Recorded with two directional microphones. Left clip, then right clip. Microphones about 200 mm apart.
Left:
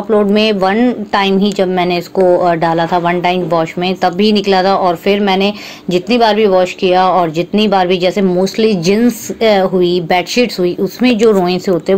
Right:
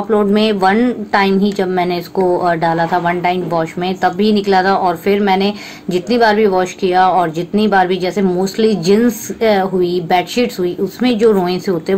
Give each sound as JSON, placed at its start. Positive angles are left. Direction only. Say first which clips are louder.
{"t": 0.1, "sound": "speech", "louder": "left 3 dB", "side_deg": 20}